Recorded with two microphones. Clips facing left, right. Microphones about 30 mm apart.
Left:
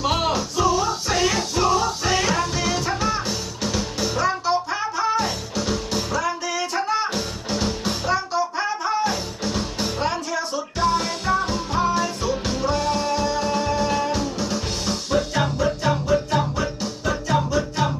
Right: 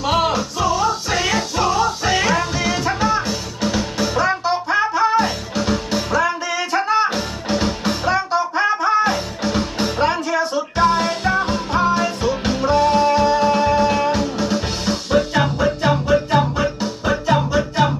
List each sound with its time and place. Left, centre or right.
0.0 s music: centre; by 17.9 s right